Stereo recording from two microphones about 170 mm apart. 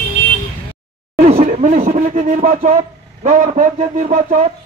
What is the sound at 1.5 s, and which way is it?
A man's voice, 45° right (ahead or behind).